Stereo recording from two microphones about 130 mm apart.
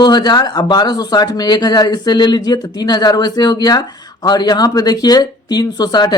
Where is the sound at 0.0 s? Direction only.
35° left (ahead or behind).